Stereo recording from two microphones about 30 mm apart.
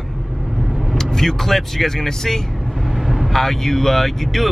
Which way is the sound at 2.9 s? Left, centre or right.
Centre.